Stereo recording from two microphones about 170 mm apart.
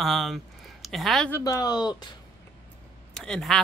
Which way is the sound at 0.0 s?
Centre (ahead or behind).